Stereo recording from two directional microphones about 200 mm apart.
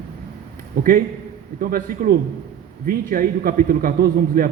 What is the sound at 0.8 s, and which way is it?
A man's voice, 45° right (ahead or behind).